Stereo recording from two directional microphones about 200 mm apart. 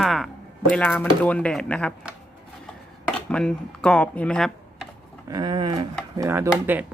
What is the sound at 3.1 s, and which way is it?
Speech, 5° left (ahead or behind).